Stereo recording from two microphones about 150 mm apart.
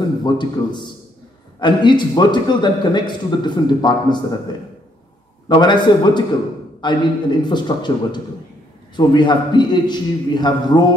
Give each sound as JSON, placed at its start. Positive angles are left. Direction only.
{"t": 0.2, "sound": "a man's voice", "side_deg": 30}